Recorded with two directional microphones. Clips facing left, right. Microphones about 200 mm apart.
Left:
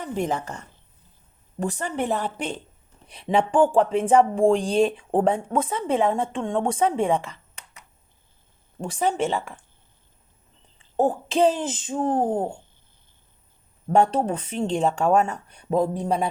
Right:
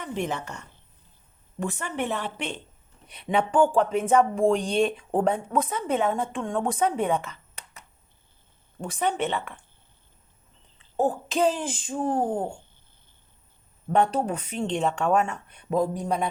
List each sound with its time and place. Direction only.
0.0 s speech: 40° left (ahead or behind)
8.8 s speech: 30° left (ahead or behind)
10.9 s speech: 30° left (ahead or behind)
13.8 s speech: 35° left (ahead or behind)